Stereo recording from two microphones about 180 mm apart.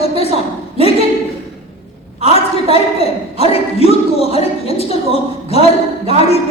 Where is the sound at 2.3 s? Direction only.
35° left (ahead or behind).